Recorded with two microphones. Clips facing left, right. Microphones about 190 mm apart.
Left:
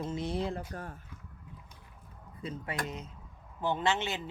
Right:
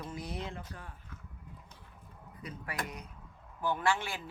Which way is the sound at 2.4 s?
25° left (ahead or behind).